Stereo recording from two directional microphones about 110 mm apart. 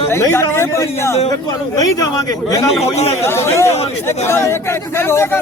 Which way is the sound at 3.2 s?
25° left (ahead or behind).